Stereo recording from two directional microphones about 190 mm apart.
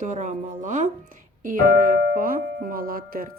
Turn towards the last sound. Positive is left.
turn(degrees=-50)  # may be behind; listen again after turning